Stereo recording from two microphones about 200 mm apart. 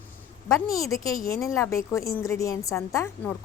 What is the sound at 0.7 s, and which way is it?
A woman's voice, 15° left (ahead or behind).